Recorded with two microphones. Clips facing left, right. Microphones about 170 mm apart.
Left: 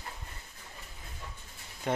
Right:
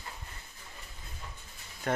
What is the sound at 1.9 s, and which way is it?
Speech, 20° left (ahead or behind).